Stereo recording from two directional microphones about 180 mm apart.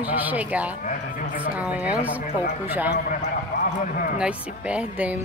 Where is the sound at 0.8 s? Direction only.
50° left (ahead or behind).